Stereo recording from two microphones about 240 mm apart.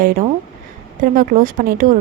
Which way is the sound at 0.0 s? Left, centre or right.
Right.